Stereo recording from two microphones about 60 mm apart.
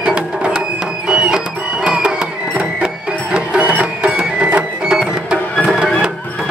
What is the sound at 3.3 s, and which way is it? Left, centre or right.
Music, centre.